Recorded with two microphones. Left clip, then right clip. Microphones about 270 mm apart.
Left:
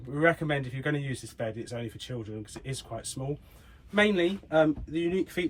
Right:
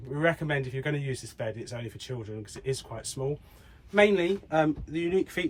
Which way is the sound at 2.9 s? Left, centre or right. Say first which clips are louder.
Right 3 dB; centre.